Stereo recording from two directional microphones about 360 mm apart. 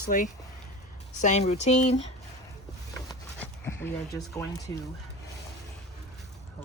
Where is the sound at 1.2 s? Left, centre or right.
Centre.